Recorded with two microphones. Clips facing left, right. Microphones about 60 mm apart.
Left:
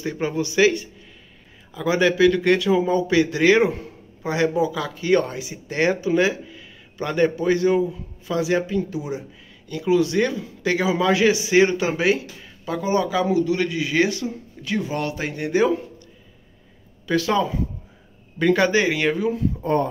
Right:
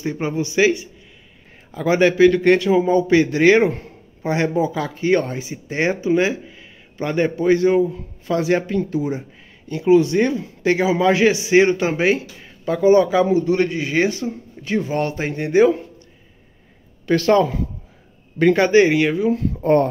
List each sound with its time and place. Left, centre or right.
0.0 s speech: right
1.7 s a man's voice: right
17.1 s speech: right
18.5 s speech: right
18.9 s speech: centre
19.6 s speech: right